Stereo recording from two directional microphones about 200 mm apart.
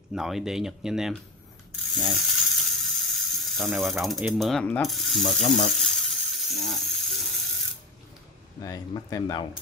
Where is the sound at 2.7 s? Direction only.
Centre (ahead or behind).